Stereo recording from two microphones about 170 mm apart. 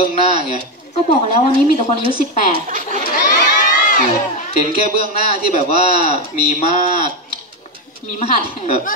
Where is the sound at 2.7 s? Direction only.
50° right (ahead or behind).